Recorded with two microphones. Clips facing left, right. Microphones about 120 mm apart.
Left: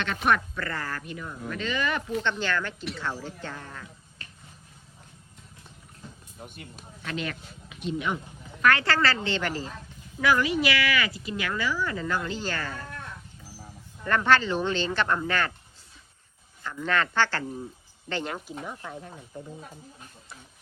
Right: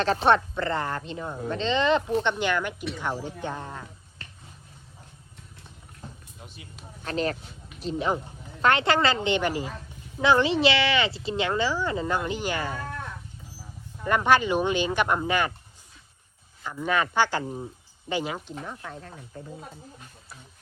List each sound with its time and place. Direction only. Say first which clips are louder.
0.0 s speech: right 5 dB; 30° right (ahead or behind)
6.5 s speech: left 3 dB; 55° left (ahead or behind)
7.0 s speech: right 5 dB; 35° right (ahead or behind)
8.6 s speech: right 2 dB; 20° right (ahead or behind)
10.2 s speech: right 3 dB; 25° right (ahead or behind)
16.6 s speech: right 1 dB; 10° right (ahead or behind)
18.4 s speech: even; 10° left (ahead or behind)